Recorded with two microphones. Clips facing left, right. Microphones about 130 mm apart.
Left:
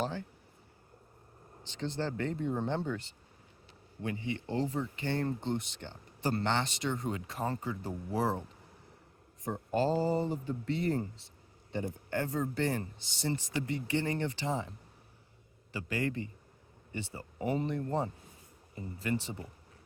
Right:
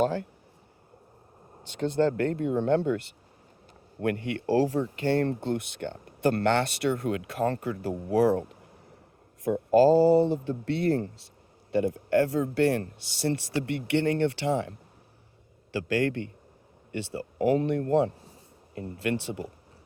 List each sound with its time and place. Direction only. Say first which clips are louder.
0.0 s speech: right 10 dB; 60° right (ahead or behind)
1.8 s speech: right 10 dB; 55° right (ahead or behind); by 4.8 s 70° right (ahead or behind)
5.2 s speech: right 6 dB; 60° right (ahead or behind)
15.7 s speech: right 8 dB; 75° right (ahead or behind)